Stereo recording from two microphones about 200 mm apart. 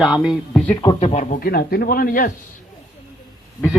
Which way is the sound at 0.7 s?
25° left (ahead or behind).